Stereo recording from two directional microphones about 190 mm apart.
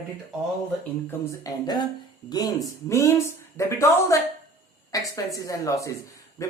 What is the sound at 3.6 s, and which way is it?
Speech, 15° left (ahead or behind).